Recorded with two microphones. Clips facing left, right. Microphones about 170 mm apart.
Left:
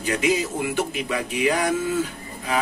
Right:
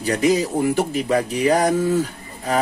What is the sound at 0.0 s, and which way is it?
Speech, 40° right (ahead or behind).